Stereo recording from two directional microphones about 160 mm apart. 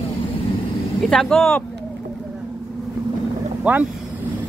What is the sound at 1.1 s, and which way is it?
Speech, centre (ahead or behind).